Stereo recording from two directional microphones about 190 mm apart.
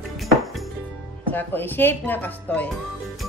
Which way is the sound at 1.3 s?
10° left (ahead or behind).